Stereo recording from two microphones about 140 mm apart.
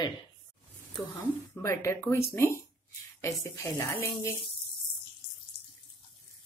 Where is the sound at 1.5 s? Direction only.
20° left (ahead or behind).